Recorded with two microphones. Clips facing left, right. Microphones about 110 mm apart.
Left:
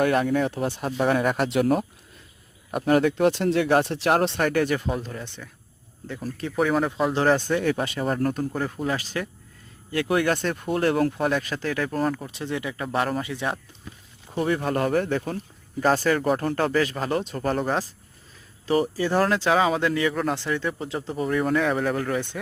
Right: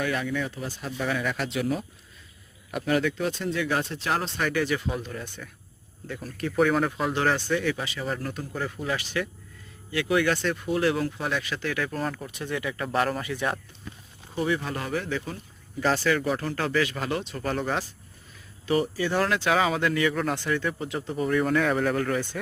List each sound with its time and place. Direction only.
0.0 s speech: 50° left (ahead or behind)
2.7 s speech: 45° left (ahead or behind)
5.1 s speech: 25° left (ahead or behind)
6.6 s speech: 10° left (ahead or behind)
7.1 s speech: 30° left (ahead or behind)
7.3 s speech: 45° left (ahead or behind)
12.0 s speech: 15° left (ahead or behind)
12.8 s speech: 10° left (ahead or behind)
13.2 s speech: 20° left (ahead or behind)
14.3 s speech: 50° left (ahead or behind)
18.6 s speech: 35° left (ahead or behind)
19.5 s speech: 25° left (ahead or behind)
21.1 s speech: 5° left (ahead or behind)